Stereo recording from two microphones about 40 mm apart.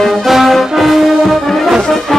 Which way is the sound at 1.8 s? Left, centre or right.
Centre.